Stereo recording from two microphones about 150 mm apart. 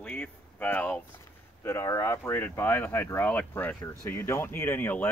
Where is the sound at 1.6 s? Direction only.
15° left (ahead or behind).